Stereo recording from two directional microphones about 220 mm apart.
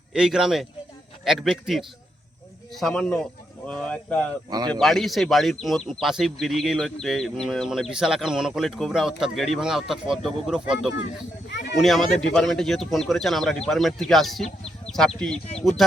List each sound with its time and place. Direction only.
0.1 s speech: 5° right (ahead or behind)
4.4 s speech: 20° right (ahead or behind)
4.7 s speech: centre (ahead or behind)